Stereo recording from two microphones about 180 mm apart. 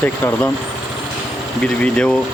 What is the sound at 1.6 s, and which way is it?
Speech, 5° left (ahead or behind).